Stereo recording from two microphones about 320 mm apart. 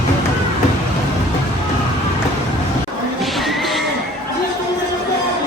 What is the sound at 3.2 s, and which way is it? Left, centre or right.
Music, centre.